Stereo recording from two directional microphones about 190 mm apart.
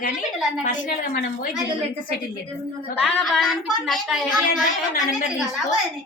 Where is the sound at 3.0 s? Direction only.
Centre (ahead or behind).